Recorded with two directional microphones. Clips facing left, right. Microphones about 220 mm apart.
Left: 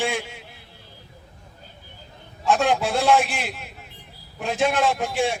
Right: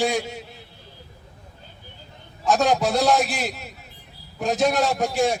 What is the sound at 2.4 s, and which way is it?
A man's voice, 40° right (ahead or behind).